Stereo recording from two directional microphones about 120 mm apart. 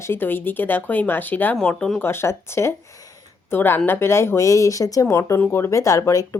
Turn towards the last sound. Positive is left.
turn(degrees=25)  # may be behind; listen again after turning